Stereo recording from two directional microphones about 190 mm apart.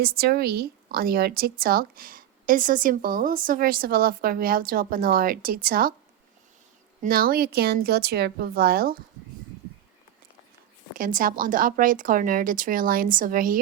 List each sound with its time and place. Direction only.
0.0 s a woman's voice: 55° right (ahead or behind)
7.0 s a woman's voice: 50° right (ahead or behind)
10.9 s a woman's voice: 45° right (ahead or behind)